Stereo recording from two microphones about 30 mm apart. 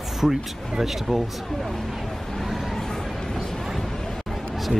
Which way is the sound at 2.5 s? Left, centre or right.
Centre.